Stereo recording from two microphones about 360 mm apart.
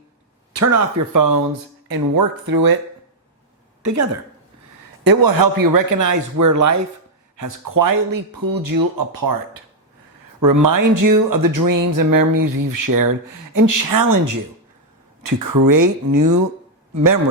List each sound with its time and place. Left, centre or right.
0.5 s speech: right
1.9 s speech: right
3.8 s speech: right
5.0 s a man's voice: right